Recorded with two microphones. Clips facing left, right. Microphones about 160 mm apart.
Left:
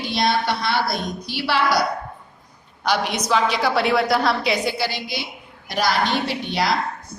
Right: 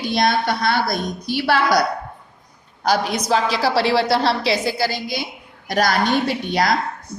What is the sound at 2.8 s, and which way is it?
A woman's voice, 40° right (ahead or behind).